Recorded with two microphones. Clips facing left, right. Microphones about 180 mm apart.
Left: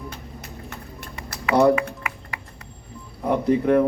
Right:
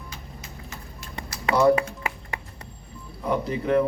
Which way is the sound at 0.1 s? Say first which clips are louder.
Left 4 dB; 60° left (ahead or behind).